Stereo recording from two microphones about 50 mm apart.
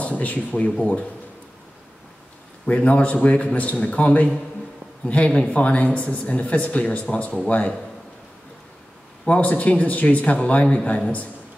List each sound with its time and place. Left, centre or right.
0.0 s speech: left
2.6 s speech: left
9.2 s speech: left